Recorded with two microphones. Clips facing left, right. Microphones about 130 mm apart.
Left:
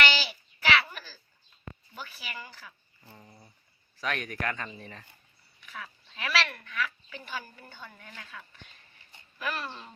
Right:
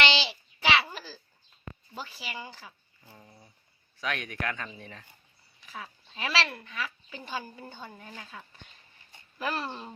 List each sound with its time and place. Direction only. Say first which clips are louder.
0.0 s a sound: right 1 dB; 25° right (ahead or behind)
2.0 s speech: right 3 dB; 30° right (ahead or behind)
3.0 s speech: left 1 dB; centre (ahead or behind)
5.5 s speech: right 1 dB; 30° right (ahead or behind)